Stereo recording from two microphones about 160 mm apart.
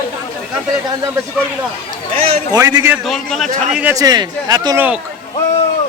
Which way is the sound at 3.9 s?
25° right (ahead or behind).